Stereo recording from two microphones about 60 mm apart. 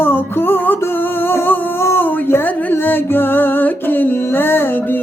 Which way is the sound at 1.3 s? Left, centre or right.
Left.